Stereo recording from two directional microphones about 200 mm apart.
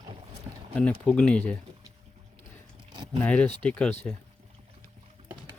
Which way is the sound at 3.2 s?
5° left (ahead or behind).